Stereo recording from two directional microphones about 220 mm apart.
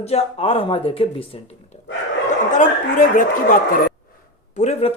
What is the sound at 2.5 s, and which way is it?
Speech, 35° left (ahead or behind).